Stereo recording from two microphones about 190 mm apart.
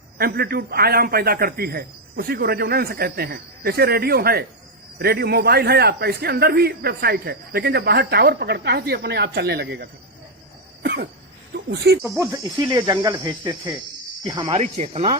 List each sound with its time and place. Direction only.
0.2 s a man's voice: 55° right (ahead or behind)
11.9 s a man's voice: 55° right (ahead or behind)
12.2 s speech: 20° right (ahead or behind)
14.5 s speech: 35° right (ahead or behind)